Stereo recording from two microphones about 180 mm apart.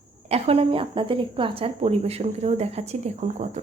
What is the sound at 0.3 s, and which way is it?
Speech, 35° right (ahead or behind).